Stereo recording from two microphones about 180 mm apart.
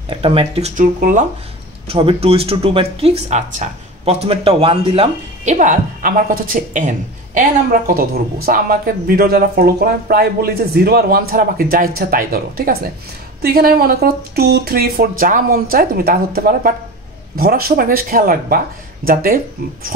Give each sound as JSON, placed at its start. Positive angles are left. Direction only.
{"t": 0.1, "sound": "speech", "side_deg": -30}
{"t": 1.9, "sound": "speech", "side_deg": -30}